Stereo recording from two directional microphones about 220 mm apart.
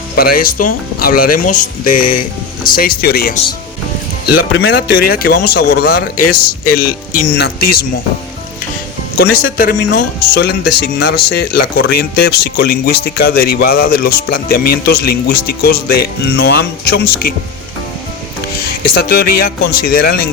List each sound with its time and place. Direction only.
0.2 s speech: 40° left (ahead or behind)
4.5 s speech: 45° left (ahead or behind)
9.2 s speech: 80° left
9.6 s speech: 45° left (ahead or behind)
18.9 s speech: 45° left (ahead or behind)